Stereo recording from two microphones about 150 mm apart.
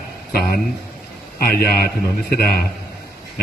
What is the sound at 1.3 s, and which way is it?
A man's voice, 90° left.